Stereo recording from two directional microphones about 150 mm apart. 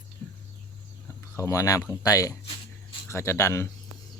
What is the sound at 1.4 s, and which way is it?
Speech, 20° left (ahead or behind).